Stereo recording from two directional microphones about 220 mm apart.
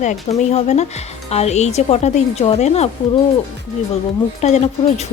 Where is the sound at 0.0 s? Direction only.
30° left (ahead or behind).